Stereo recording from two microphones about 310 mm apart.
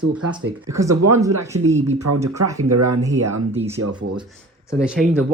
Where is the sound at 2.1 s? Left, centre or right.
Right.